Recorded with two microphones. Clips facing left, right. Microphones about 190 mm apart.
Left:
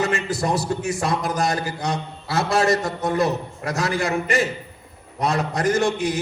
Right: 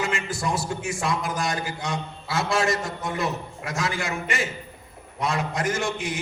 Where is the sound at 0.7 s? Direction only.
40° left (ahead or behind).